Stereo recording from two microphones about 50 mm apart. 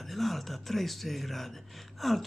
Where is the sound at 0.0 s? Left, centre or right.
Centre.